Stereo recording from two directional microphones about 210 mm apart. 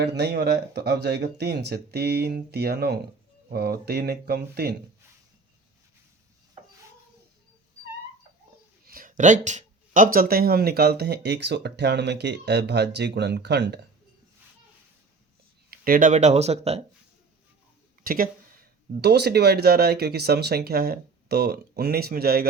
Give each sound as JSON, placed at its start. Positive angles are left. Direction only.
{"t": 0.2, "sound": "speech", "side_deg": -50}
{"t": 8.9, "sound": "speech", "side_deg": -40}
{"t": 15.7, "sound": "speech", "side_deg": -45}
{"t": 18.0, "sound": "speech", "side_deg": -45}